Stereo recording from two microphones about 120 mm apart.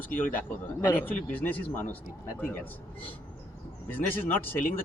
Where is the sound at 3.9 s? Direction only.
15° left (ahead or behind).